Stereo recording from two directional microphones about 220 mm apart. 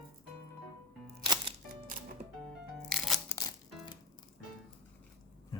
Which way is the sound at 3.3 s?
15° left (ahead or behind).